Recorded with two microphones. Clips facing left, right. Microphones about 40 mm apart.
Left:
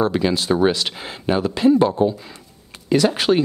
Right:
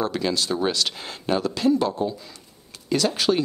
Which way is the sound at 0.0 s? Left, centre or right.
Left.